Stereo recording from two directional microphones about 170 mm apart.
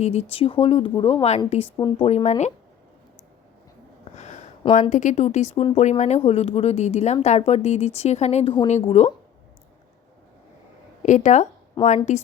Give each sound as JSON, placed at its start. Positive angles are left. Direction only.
{"t": 0.0, "sound": "speech", "side_deg": 40}
{"t": 1.7, "sound": "speech", "side_deg": 25}
{"t": 2.0, "sound": "speech", "side_deg": 40}
{"t": 4.1, "sound": "a sound", "side_deg": 45}
{"t": 4.7, "sound": "speech", "side_deg": 45}
{"t": 11.0, "sound": "speech", "side_deg": 45}
{"t": 11.8, "sound": "speech", "side_deg": 25}